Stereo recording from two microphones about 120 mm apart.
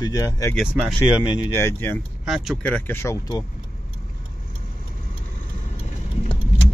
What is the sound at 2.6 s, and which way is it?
Speech, 15° left (ahead or behind).